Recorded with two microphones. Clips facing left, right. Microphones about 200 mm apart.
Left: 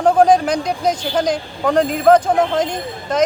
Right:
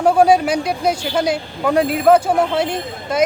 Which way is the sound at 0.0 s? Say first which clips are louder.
Even; 10° right (ahead or behind).